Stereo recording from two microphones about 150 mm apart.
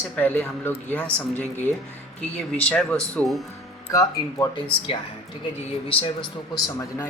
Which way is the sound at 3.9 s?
20° left (ahead or behind).